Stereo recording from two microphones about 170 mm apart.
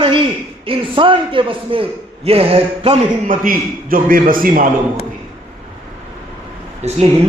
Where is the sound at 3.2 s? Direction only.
55° right (ahead or behind).